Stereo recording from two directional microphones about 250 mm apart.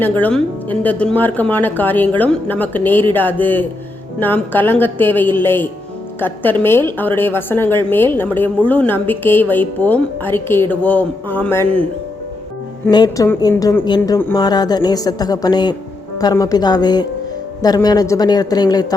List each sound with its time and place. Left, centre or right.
0.0 s a woman's voice: centre
12.8 s a woman's voice: centre